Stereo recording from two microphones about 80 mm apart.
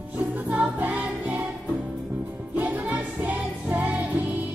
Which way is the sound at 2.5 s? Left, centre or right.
Right.